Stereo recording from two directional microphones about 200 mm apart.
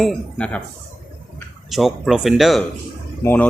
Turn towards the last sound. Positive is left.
turn(degrees=10)  # may be behind; listen again after turning